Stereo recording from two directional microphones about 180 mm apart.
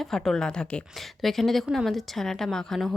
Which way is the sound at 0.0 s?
Centre (ahead or behind).